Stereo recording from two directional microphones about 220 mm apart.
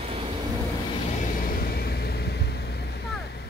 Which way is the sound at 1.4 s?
40° left (ahead or behind).